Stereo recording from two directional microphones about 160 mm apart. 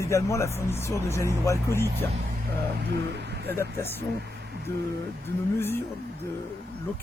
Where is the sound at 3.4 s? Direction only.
15° left (ahead or behind).